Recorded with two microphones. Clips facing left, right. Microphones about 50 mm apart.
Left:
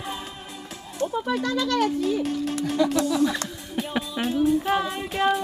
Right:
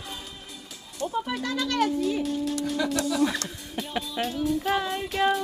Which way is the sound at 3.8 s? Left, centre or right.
Centre.